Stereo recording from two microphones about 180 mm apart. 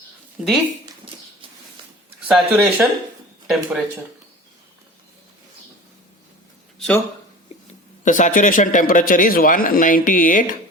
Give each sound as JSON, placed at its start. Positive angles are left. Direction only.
{"t": 0.4, "sound": "speech", "side_deg": -5}
{"t": 2.2, "sound": "speech", "side_deg": -5}
{"t": 6.7, "sound": "a sound", "side_deg": 5}
{"t": 7.7, "sound": "speech", "side_deg": 45}